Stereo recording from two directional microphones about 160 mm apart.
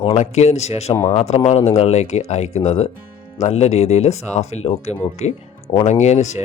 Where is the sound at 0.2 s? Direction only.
45° left (ahead or behind).